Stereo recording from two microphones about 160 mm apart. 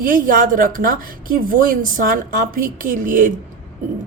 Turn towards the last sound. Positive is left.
turn(degrees=-60)  # may be behind; listen again after turning